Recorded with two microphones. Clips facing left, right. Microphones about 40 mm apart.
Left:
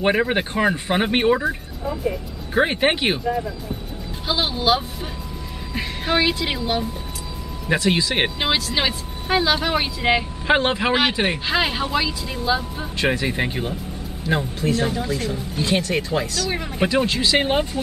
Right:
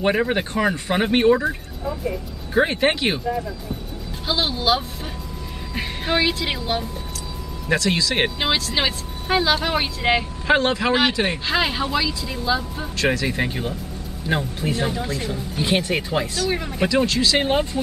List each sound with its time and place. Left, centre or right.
0.0 s speech: centre
0.7 s speech: centre
7.6 s speech: centre
10.4 s speech: centre
14.2 s speech: centre
15.6 s speech: centre
16.4 s speech: centre
16.9 s speech: centre